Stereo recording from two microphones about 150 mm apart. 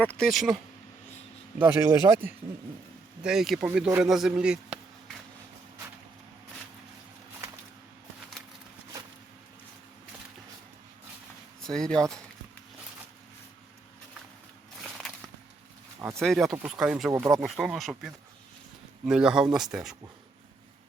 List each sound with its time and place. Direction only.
0.0 s speech: 5° left (ahead or behind)
1.5 s speech: 15° right (ahead or behind)
3.2 s speech: 5° right (ahead or behind)
11.6 s speech: 5° left (ahead or behind)
14.8 s walk: centre (ahead or behind)
16.0 s speech: 15° right (ahead or behind)
16.2 s speech: centre (ahead or behind)
17.1 s speech: 20° right (ahead or behind)
17.3 s speech: centre (ahead or behind)